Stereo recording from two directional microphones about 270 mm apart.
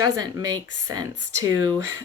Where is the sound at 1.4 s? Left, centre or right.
Centre.